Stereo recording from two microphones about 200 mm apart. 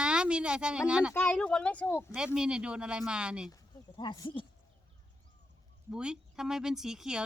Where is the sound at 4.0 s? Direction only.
20° left (ahead or behind).